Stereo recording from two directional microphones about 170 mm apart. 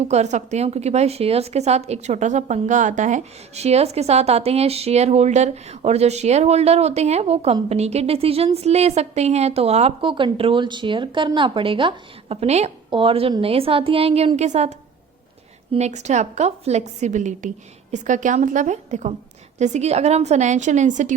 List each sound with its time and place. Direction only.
0.0 s a woman's voice: 40° right (ahead or behind)